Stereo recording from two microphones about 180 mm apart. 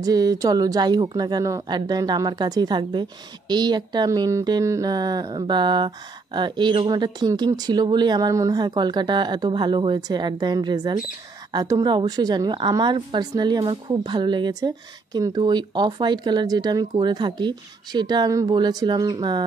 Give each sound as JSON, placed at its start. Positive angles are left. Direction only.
{"t": 0.0, "sound": "speech", "side_deg": -20}